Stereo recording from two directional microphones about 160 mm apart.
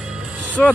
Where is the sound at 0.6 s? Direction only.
10° left (ahead or behind).